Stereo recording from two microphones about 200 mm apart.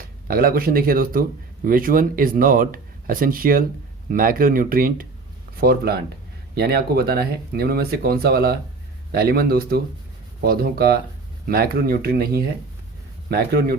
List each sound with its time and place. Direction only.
0.0 s speech: 45° right (ahead or behind)